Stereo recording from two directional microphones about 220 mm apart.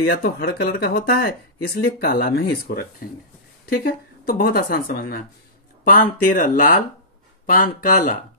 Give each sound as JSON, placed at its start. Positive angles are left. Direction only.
{"t": 0.0, "sound": "speech", "side_deg": 45}